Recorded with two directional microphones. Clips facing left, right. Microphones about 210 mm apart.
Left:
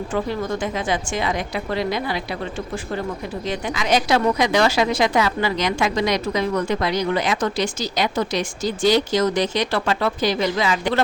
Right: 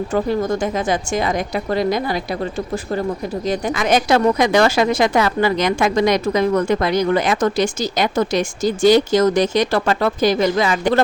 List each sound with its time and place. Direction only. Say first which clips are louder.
0.1 s a woman's voice: right 5 dB; 40° right (ahead or behind)